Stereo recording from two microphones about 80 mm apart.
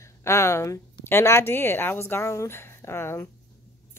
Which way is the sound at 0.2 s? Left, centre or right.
Left.